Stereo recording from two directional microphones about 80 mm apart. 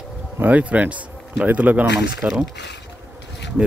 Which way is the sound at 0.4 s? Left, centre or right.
Centre.